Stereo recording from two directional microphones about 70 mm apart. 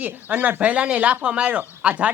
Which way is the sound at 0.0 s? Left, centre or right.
Right.